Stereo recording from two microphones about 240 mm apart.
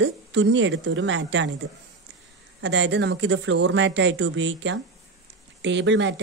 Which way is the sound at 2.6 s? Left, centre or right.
Right.